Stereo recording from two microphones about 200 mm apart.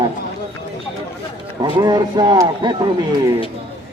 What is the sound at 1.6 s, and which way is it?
Speech, 20° right (ahead or behind).